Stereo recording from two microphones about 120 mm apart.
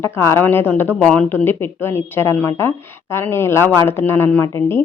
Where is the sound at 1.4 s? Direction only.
20° left (ahead or behind).